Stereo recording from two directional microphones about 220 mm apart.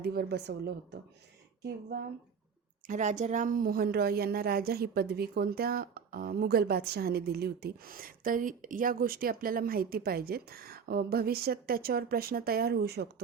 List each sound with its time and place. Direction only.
0.0 s a woman's voice: 45° right (ahead or behind)
2.8 s a woman's voice: 35° right (ahead or behind)